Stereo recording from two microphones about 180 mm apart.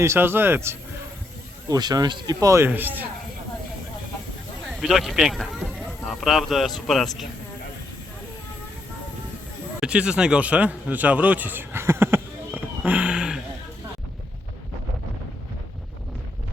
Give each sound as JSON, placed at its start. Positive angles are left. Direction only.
{"t": 0.0, "sound": "speech", "side_deg": -15}
{"t": 4.6, "sound": "speech", "side_deg": 0}
{"t": 9.8, "sound": "a sound", "side_deg": -5}